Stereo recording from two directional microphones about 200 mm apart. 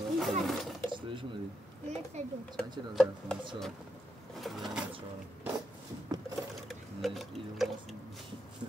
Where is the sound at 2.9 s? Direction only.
5° left (ahead or behind).